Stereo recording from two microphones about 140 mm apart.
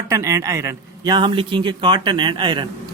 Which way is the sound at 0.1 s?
20° right (ahead or behind).